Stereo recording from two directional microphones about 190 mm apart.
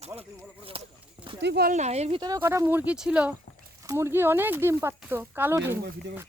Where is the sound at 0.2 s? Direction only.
30° right (ahead or behind).